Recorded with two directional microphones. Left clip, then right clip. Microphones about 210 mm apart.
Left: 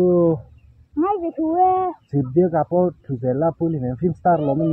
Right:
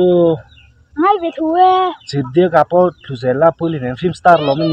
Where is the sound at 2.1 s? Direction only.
15° right (ahead or behind).